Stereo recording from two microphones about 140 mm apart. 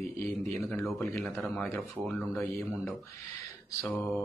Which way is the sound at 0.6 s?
15° left (ahead or behind).